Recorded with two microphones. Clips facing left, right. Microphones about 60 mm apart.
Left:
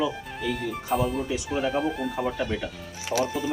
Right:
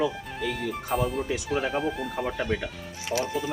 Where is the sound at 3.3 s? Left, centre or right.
Centre.